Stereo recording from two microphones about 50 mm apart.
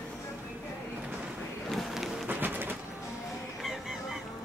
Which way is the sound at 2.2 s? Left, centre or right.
Right.